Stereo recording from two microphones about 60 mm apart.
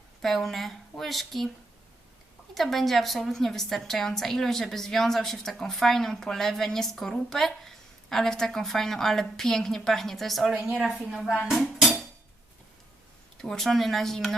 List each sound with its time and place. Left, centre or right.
0.2 s a woman's voice: centre
2.6 s a woman's voice: centre
10.5 s speech: centre
11.4 s dishes: centre
13.4 s a woman's voice: centre